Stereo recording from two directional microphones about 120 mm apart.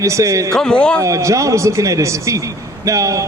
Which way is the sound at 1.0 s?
25° right (ahead or behind).